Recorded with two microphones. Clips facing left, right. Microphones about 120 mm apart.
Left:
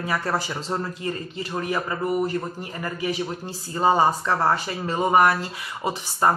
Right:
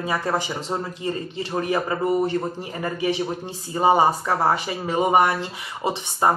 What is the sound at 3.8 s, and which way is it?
Speech, 15° right (ahead or behind).